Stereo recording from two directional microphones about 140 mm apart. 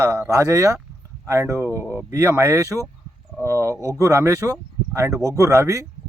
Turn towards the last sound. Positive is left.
turn(degrees=-20)  # may be behind; listen again after turning